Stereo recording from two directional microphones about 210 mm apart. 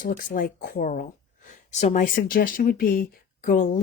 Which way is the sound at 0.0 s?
40° left (ahead or behind).